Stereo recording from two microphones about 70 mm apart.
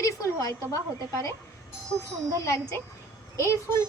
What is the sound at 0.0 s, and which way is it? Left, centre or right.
Speech, left.